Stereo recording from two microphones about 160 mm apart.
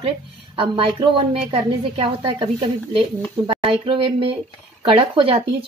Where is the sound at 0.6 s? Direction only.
30° right (ahead or behind).